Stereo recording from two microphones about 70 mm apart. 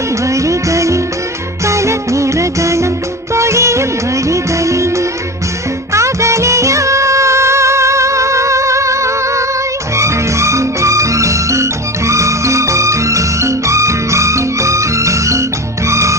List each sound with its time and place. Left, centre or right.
0.3 s music: right
3.3 s music of bollywood: right
4.3 s music: right